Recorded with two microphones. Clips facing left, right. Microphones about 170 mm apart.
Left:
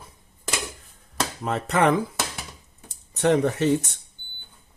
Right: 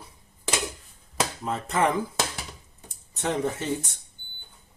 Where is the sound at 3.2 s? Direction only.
70° left (ahead or behind).